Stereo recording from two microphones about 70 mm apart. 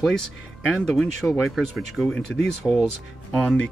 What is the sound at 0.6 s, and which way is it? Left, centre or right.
Speech, centre.